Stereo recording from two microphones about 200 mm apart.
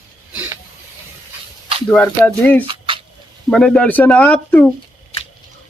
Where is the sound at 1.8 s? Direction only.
10° left (ahead or behind).